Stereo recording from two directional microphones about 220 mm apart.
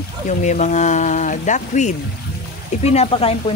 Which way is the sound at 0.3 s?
35° left (ahead or behind).